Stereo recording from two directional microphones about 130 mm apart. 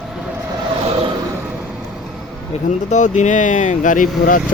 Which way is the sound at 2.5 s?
50° left (ahead or behind).